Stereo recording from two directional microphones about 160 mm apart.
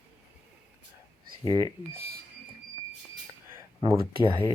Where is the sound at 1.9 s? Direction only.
70° right (ahead or behind).